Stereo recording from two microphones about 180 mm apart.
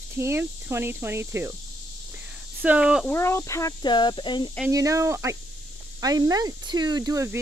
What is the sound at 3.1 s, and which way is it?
Speech, 15° left (ahead or behind).